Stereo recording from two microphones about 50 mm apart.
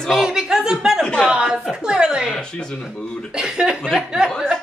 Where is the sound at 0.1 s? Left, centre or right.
Centre.